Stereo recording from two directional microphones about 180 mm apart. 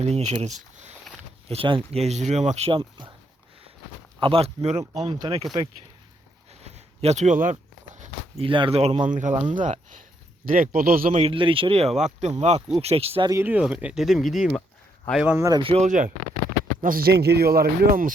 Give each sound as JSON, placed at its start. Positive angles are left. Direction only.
{"t": 0.0, "sound": "speech", "side_deg": -40}
{"t": 4.2, "sound": "speech", "side_deg": -30}
{"t": 4.8, "sound": "speech", "side_deg": -20}
{"t": 6.6, "sound": "a sound", "side_deg": -35}
{"t": 8.4, "sound": "speech", "side_deg": -30}
{"t": 11.2, "sound": "speech", "side_deg": -30}
{"t": 13.3, "sound": "speech", "side_deg": -10}
{"t": 15.2, "sound": "speech", "side_deg": -10}
{"t": 15.6, "sound": "speech", "side_deg": -35}